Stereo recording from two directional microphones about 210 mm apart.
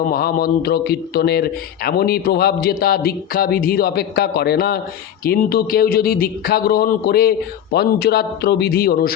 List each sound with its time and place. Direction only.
0.1 s a man's voice: 45° left (ahead or behind)